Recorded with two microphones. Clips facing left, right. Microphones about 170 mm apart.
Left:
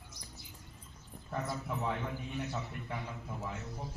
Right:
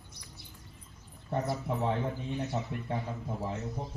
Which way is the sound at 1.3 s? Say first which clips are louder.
Right 6 dB; 30° right (ahead or behind).